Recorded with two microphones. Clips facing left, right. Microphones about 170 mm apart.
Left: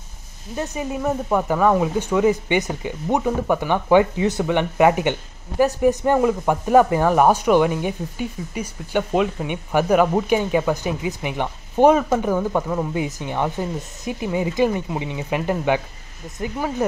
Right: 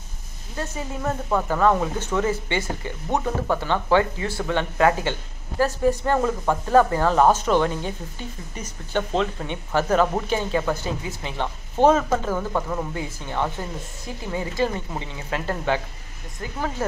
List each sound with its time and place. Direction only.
0.6 s speech: 15° left (ahead or behind)